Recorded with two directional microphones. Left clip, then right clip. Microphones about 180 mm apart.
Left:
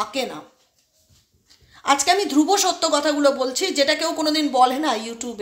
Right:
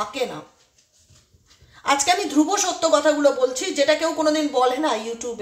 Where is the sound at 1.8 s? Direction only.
30° left (ahead or behind).